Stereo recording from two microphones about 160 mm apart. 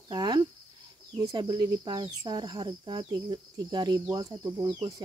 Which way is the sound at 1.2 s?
25° right (ahead or behind).